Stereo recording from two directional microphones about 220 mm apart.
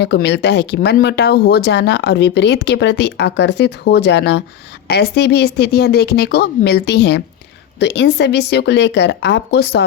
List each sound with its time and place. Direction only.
0.0 s speech: 50° left (ahead or behind)